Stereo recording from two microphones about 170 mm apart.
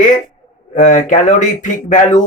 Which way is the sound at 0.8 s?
50° left (ahead or behind).